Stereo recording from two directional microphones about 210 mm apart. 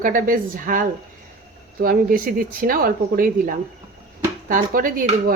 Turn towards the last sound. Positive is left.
turn(degrees=-40)  # may be behind; listen again after turning